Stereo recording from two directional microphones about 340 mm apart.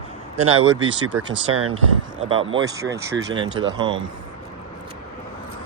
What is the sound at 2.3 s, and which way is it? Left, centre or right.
Speech, centre.